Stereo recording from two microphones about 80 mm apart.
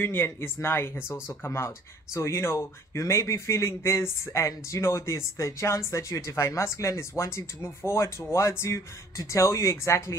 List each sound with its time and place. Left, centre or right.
0.0 s speech: left